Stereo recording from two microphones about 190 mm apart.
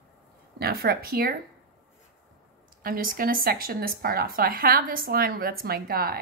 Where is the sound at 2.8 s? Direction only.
50° right (ahead or behind).